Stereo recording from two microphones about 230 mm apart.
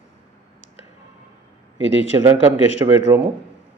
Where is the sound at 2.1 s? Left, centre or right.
Centre.